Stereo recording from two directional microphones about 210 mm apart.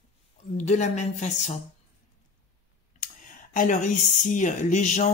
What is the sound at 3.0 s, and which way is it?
Speech, 40° left (ahead or behind).